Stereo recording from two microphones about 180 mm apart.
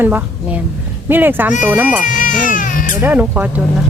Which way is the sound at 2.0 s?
45° left (ahead or behind).